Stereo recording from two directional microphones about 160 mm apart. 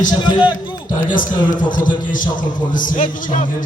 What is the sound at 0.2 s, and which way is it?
Speech, 25° left (ahead or behind).